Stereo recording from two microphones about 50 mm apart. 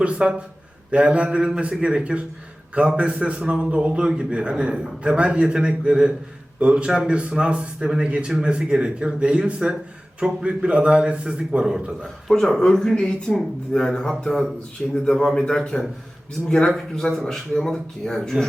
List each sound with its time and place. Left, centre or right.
0.0 s a man's voice: right
12.0 s speech: centre
16.9 s speech: centre